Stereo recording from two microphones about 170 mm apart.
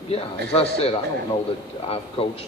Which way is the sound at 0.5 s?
35° left (ahead or behind).